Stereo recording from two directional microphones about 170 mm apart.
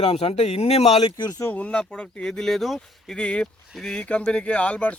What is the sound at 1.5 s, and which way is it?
Speech, 5° left (ahead or behind).